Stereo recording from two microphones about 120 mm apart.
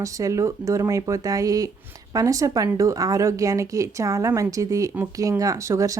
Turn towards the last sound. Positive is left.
turn(degrees=-25)  # may be behind; listen again after turning